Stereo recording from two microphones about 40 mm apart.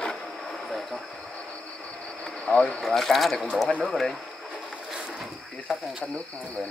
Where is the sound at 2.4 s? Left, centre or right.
Left.